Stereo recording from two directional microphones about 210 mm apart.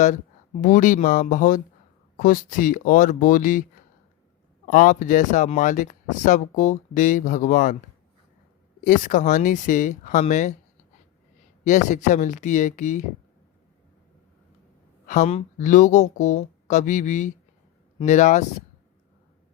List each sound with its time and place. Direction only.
0.6 s speech: 40° left (ahead or behind)
4.6 s speech: 40° left (ahead or behind)
8.8 s speech: 40° left (ahead or behind)
11.6 s speech: 35° left (ahead or behind)
15.0 s speech: 35° left (ahead or behind)